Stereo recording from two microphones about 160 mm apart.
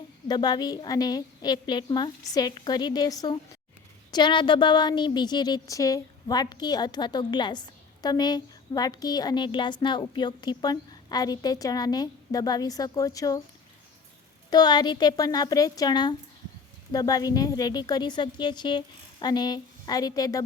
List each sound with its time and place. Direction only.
0.3 s a woman's voice: 25° left (ahead or behind)
14.5 s a woman's voice: 25° left (ahead or behind)